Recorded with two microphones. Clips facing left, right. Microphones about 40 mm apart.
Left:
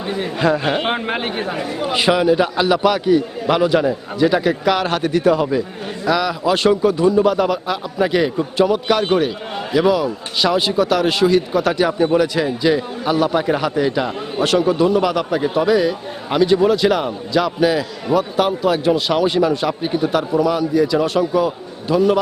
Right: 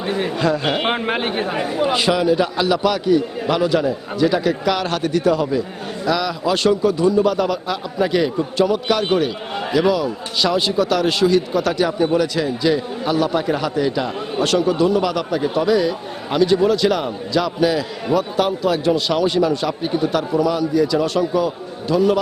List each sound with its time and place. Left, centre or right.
0.0 s a sound: centre
0.3 s a man's voice: left
0.8 s speech: centre
2.0 s a man's voice: left
6.1 s a man's voice: centre